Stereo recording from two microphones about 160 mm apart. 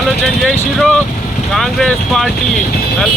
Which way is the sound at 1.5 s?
Centre (ahead or behind).